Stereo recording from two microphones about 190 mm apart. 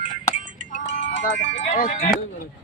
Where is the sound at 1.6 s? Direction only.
45° left (ahead or behind).